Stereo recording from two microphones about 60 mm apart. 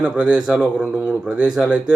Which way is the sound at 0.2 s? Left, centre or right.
Centre.